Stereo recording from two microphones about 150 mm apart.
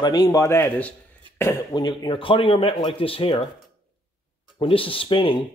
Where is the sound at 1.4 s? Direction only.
25° left (ahead or behind).